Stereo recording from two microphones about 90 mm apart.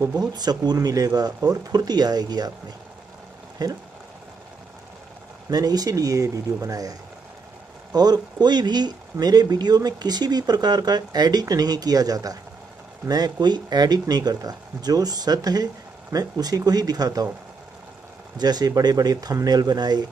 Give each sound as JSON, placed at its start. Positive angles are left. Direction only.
{"t": 0.2, "sound": "speech", "side_deg": -50}
{"t": 3.6, "sound": "speech", "side_deg": -45}
{"t": 5.5, "sound": "speech", "side_deg": -45}
{"t": 18.4, "sound": "speech", "side_deg": -50}